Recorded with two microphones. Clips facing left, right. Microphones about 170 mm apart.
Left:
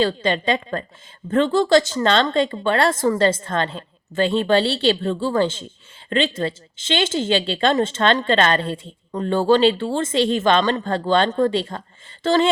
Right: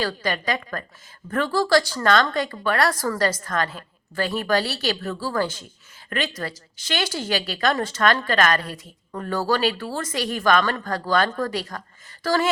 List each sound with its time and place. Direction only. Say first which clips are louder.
0.0 s speech: left 6 dB; 25° left (ahead or behind)